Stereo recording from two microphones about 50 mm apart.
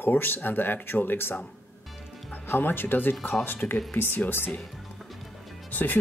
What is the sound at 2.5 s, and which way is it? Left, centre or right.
Speech, left.